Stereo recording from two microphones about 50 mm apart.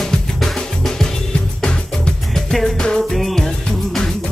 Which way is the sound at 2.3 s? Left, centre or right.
Centre.